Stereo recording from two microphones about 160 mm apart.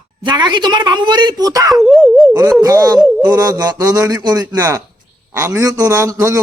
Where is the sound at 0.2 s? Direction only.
25° right (ahead or behind).